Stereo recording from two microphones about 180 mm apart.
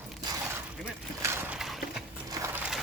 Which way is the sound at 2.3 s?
15° right (ahead or behind).